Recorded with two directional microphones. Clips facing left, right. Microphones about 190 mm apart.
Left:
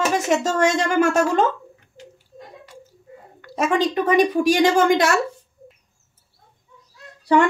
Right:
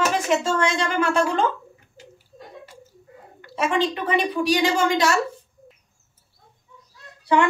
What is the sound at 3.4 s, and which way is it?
A woman's voice, 45° left (ahead or behind).